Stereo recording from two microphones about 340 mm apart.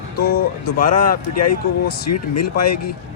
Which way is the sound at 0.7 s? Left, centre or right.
Left.